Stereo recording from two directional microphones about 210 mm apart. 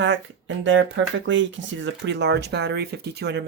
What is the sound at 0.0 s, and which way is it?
Speech, 60° right (ahead or behind).